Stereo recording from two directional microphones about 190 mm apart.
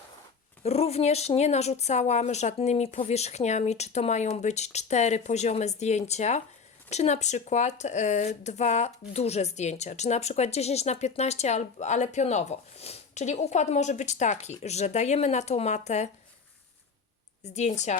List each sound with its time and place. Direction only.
0.6 s speech: 35° left (ahead or behind)
17.4 s speech: 40° left (ahead or behind)